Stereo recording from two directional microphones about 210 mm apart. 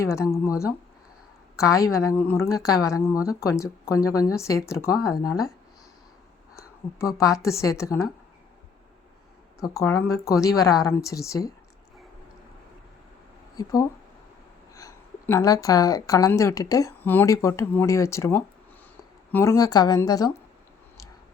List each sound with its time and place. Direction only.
0.0 s a woman's voice: 15° left (ahead or behind)
6.6 s a woman's voice: 15° left (ahead or behind)
9.6 s a woman's voice: 15° left (ahead or behind)
13.6 s a woman's voice: 15° left (ahead or behind)